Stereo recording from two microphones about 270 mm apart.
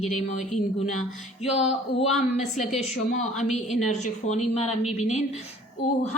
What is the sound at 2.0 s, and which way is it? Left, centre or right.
Speech, left.